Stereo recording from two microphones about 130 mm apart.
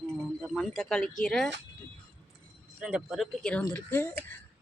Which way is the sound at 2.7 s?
5° right (ahead or behind).